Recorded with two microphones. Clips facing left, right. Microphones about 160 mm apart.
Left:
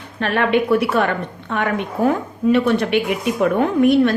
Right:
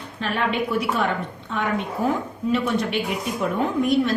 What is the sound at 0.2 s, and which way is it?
A woman's voice, 65° left (ahead or behind).